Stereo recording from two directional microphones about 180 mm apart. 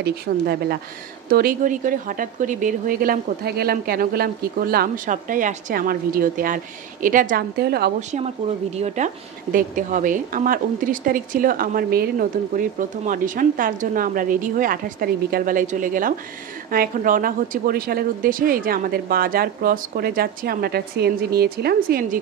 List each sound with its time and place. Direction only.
0.0 s a woman's voice: 60° right (ahead or behind)
8.1 s a woman's voice: 35° right (ahead or behind); by 22.2 s 55° right (ahead or behind)